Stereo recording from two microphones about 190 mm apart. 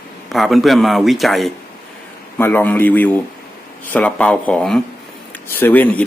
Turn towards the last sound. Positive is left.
turn(degrees=10)  # may be behind; listen again after turning